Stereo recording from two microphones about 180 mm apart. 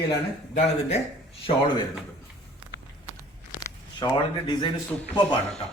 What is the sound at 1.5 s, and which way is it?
Speech, 35° left (ahead or behind).